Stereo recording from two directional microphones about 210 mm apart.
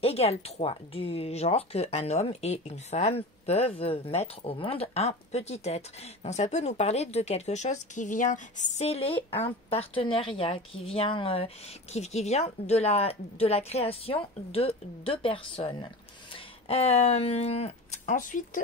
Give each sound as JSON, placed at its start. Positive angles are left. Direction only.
{"t": 0.0, "sound": "a woman's voice", "side_deg": 30}